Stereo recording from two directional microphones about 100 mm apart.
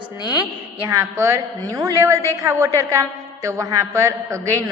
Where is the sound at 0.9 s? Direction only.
30° right (ahead or behind).